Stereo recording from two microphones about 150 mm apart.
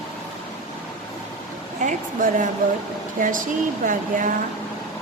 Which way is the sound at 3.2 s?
65° right (ahead or behind).